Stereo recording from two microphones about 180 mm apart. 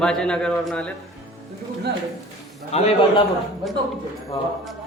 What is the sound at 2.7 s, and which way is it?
Speech, 35° left (ahead or behind).